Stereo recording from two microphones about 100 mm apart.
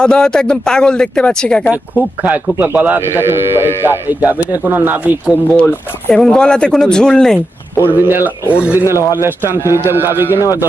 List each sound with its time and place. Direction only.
0.0 s speech: 5° left (ahead or behind)
1.7 s speech: 15° right (ahead or behind)
6.1 s speech: 5° left (ahead or behind)
7.8 s speech: 20° right (ahead or behind)